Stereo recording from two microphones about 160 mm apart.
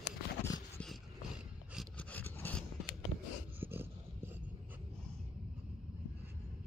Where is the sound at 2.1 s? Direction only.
10° left (ahead or behind).